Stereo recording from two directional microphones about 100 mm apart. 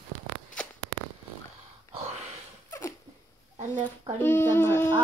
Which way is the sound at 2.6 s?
30° left (ahead or behind).